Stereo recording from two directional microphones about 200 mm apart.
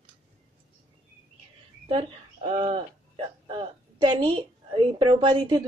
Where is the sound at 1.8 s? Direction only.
25° right (ahead or behind).